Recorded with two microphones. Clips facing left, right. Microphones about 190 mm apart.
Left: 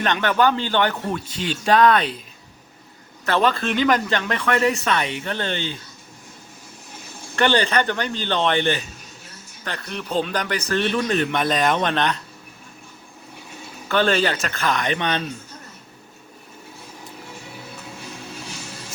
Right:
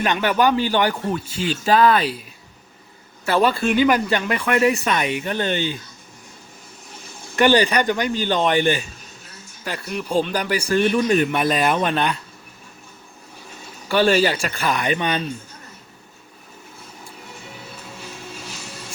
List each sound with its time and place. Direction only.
0.0 s speech: 10° right (ahead or behind)
3.2 s speech: 10° right (ahead or behind)
7.3 s speech: 10° right (ahead or behind)
13.8 s speech: 10° right (ahead or behind)